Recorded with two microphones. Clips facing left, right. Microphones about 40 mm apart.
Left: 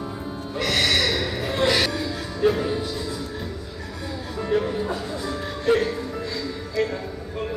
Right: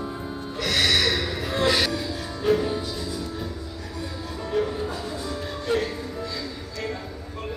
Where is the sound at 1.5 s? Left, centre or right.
Left.